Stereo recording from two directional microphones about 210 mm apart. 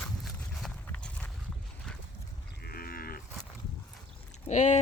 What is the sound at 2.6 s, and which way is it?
Livestock, 45° left (ahead or behind).